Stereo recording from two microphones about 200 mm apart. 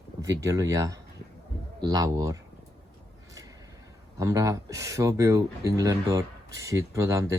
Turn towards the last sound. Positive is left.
turn(degrees=-15)  # may be behind; listen again after turning